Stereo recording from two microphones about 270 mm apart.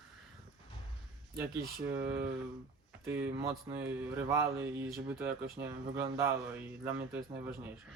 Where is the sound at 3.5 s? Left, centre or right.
Centre.